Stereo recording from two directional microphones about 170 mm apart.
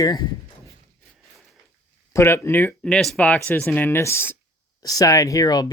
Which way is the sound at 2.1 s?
15° left (ahead or behind).